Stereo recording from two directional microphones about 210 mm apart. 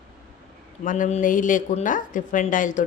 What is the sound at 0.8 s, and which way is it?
A woman's voice, 35° left (ahead or behind).